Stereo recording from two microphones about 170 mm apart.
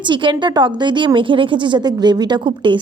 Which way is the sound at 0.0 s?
30° right (ahead or behind).